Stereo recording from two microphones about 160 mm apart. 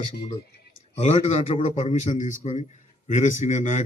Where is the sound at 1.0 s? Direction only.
40° left (ahead or behind).